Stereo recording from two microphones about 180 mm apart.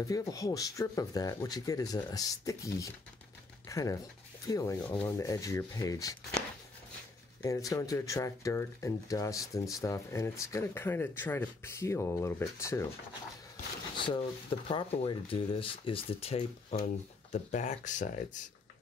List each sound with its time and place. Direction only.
0.0 s speech: 20° left (ahead or behind)
7.4 s speech: 20° left (ahead or behind)
13.9 s a sound: 25° left (ahead or behind)
14.7 s speech: 30° left (ahead or behind); by 18.4 s 45° left (ahead or behind)